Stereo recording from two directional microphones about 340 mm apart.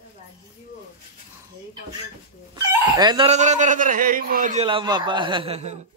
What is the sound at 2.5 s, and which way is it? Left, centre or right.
A child's voice, centre.